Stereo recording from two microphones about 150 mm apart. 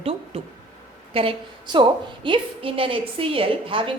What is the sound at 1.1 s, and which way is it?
A woman's voice, 35° right (ahead or behind).